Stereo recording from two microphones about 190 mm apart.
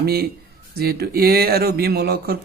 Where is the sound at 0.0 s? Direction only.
55° right (ahead or behind).